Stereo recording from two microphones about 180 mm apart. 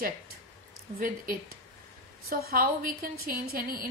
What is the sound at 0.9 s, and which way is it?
A woman's voice, 55° right (ahead or behind).